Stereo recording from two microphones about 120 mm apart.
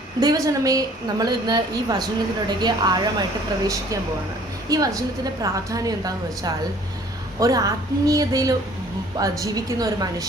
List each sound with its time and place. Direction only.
0.2 s a woman's voice: 30° right (ahead or behind)
4.7 s a woman's voice: 30° right (ahead or behind)